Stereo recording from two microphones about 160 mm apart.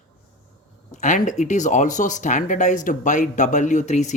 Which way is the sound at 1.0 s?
50° left (ahead or behind).